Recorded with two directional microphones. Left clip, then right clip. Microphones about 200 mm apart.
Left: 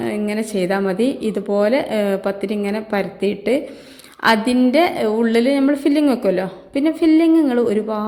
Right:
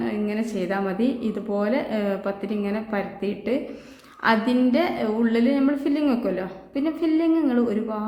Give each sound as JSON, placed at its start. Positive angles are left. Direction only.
{"t": 0.0, "sound": "a woman's voice", "side_deg": 30}